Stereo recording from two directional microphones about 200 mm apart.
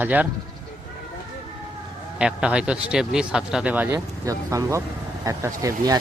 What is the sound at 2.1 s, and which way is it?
Speech, 5° right (ahead or behind).